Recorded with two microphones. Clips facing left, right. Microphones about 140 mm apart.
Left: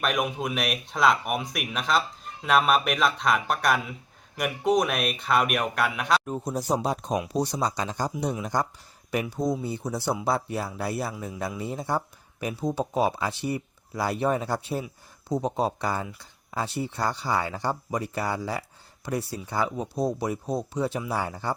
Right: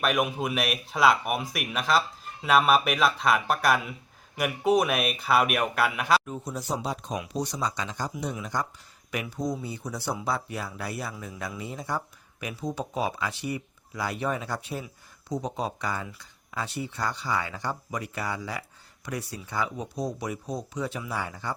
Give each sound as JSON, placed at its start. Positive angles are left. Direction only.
{"t": 0.0, "sound": "speech", "side_deg": -5}
{"t": 6.2, "sound": "speech", "side_deg": 40}
{"t": 7.2, "sound": "speech", "side_deg": 30}